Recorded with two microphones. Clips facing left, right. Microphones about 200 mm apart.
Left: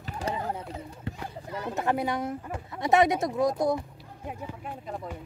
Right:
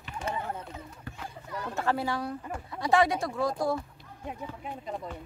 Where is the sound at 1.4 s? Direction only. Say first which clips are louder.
Left 2 dB; 25° left (ahead or behind).